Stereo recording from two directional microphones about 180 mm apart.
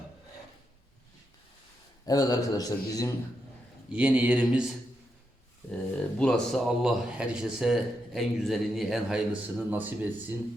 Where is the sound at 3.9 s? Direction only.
10° right (ahead or behind).